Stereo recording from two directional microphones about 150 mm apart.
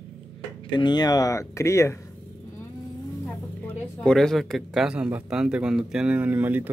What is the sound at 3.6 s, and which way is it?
Speech, 5° left (ahead or behind).